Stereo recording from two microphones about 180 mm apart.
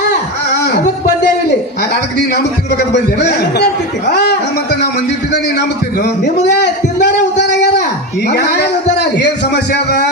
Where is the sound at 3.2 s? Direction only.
70° left (ahead or behind).